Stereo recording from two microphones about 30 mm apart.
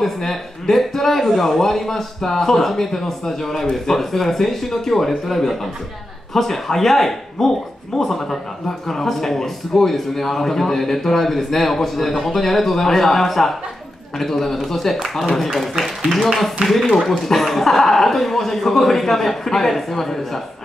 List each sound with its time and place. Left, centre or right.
0.0 s a man's voice: centre
6.3 s a man's voice: centre
16.6 s speech: right
16.9 s a man's voice: centre